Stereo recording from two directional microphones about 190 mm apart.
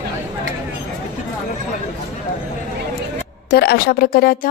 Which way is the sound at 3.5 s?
55° left (ahead or behind).